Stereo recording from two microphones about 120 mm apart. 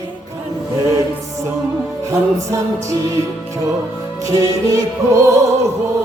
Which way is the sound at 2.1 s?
25° right (ahead or behind).